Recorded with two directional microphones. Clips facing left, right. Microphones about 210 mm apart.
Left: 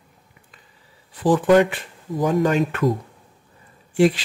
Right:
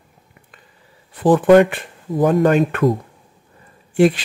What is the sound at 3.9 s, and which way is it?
Speech, 55° right (ahead or behind).